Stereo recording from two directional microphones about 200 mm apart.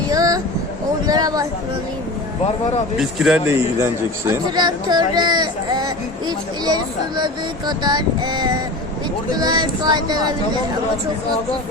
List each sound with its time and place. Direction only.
0.1 s a sound: 15° right (ahead or behind)
3.0 s a man's voice: centre (ahead or behind)
3.8 s speech: 15° right (ahead or behind)